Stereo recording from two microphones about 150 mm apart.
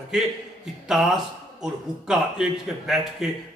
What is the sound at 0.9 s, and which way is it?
A man's voice, centre (ahead or behind).